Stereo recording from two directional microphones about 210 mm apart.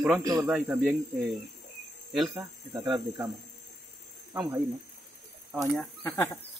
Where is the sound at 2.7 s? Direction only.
15° right (ahead or behind).